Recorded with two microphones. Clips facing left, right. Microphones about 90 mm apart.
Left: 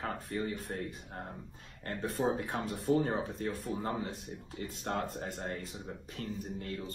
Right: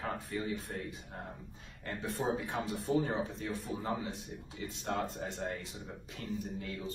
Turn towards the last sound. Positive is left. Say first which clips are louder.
# even
turn(degrees=50)  # may be behind; listen again after turning